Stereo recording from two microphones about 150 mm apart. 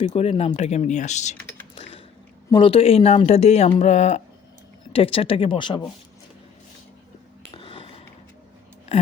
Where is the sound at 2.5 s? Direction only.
35° left (ahead or behind).